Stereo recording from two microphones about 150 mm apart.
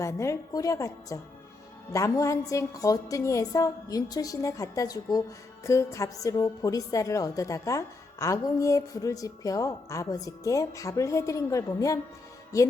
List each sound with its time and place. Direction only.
0.0 s a woman's voice: 20° left (ahead or behind)